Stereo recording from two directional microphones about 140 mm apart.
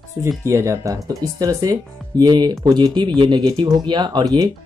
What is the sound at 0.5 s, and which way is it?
Speech, 20° right (ahead or behind).